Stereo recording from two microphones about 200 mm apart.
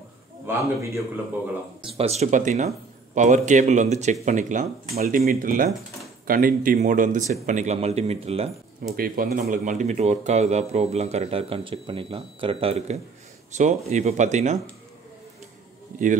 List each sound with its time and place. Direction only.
0.5 s a man's voice: 15° right (ahead or behind)
2.0 s speech: 30° right (ahead or behind)
4.9 s speech: 50° right (ahead or behind); by 8.5 s 30° right (ahead or behind)
8.9 s speech: 45° right (ahead or behind)